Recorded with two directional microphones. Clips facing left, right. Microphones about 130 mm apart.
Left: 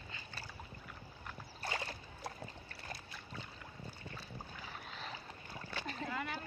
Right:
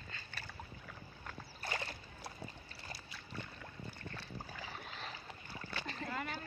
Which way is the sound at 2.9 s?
90° right.